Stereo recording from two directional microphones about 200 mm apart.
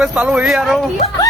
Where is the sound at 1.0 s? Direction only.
30° left (ahead or behind).